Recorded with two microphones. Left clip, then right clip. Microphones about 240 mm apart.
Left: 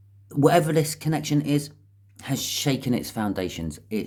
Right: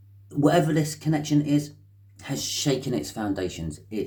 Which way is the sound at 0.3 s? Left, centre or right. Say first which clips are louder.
Left 2 dB; left.